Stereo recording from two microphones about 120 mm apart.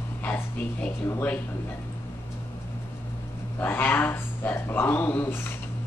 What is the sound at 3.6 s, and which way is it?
Speech, 15° left (ahead or behind).